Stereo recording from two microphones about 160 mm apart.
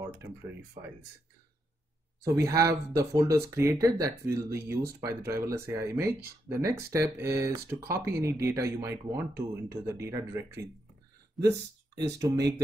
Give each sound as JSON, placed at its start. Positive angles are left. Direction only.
{"t": 0.8, "sound": "speech", "side_deg": -50}
{"t": 2.2, "sound": "speech", "side_deg": -20}
{"t": 11.4, "sound": "speech", "side_deg": 0}
{"t": 12.1, "sound": "speech", "side_deg": -20}